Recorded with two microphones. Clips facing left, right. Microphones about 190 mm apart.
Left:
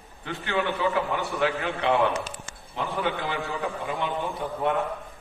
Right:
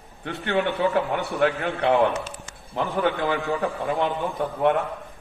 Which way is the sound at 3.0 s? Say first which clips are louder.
Right 6 dB; 50° right (ahead or behind).